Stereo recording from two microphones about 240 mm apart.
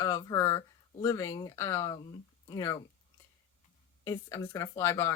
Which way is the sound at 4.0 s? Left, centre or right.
Centre.